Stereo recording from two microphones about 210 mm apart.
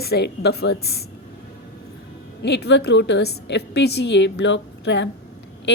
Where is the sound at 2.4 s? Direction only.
55° left (ahead or behind).